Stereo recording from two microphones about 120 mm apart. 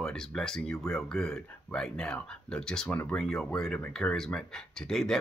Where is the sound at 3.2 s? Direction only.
5° left (ahead or behind).